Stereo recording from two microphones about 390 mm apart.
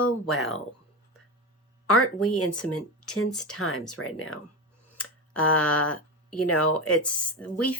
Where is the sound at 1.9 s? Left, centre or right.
Left.